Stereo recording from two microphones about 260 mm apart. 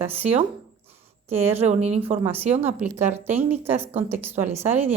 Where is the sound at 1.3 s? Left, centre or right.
Right.